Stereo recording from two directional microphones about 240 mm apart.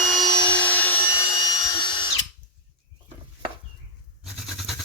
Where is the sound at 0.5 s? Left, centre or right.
Centre.